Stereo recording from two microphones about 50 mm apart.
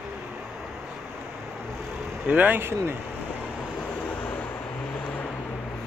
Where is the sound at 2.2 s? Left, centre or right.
Right.